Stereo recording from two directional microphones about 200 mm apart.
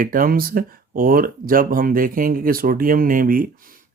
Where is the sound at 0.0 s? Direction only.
45° right (ahead or behind).